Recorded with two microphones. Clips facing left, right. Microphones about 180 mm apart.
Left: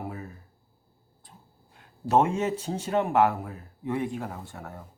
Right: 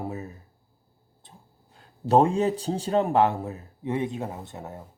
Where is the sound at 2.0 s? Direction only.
35° right (ahead or behind).